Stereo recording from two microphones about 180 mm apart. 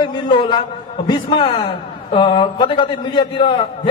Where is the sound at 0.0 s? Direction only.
25° left (ahead or behind).